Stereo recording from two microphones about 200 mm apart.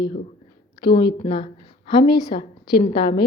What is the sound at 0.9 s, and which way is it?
Speech, 55° left (ahead or behind).